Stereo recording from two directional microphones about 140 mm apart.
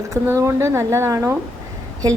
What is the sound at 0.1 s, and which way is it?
A woman's voice, 20° right (ahead or behind).